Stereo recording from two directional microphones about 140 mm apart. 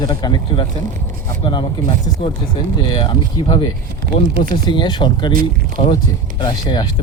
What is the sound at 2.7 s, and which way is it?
Speech, 35° left (ahead or behind).